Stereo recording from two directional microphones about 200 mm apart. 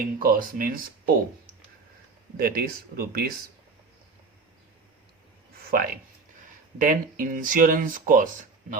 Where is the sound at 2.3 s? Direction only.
45° right (ahead or behind).